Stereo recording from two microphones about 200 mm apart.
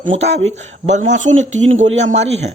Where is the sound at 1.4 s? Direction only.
85° right.